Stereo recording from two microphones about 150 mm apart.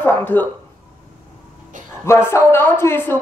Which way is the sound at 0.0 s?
15° left (ahead or behind).